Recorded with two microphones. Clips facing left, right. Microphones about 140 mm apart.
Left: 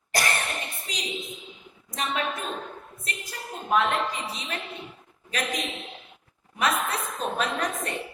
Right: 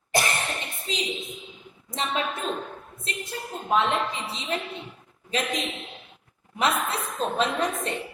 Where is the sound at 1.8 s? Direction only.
30° right (ahead or behind).